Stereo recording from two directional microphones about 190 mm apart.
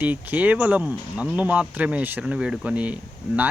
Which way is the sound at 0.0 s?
10° right (ahead or behind).